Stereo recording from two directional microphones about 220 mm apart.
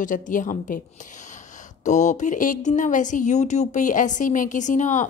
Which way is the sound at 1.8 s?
35° left (ahead or behind).